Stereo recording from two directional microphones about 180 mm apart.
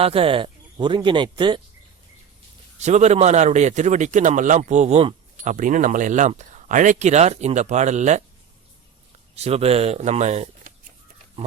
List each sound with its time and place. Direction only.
0.0 s speech: 30° right (ahead or behind)
2.7 s speech: 40° right (ahead or behind)
9.3 s speech: 35° right (ahead or behind)